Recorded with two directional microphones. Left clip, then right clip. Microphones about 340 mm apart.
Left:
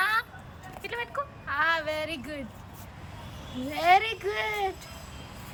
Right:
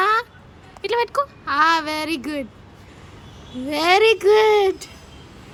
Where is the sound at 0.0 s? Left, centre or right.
Centre.